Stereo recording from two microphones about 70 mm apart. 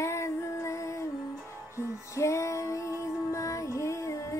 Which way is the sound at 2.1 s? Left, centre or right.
Left.